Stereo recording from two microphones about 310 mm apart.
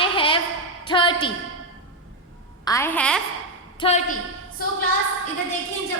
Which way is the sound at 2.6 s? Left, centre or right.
Centre.